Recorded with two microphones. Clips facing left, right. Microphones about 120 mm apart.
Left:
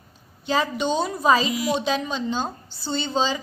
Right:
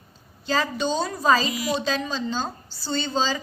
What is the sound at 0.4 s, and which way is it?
A woman's voice, 20° left (ahead or behind).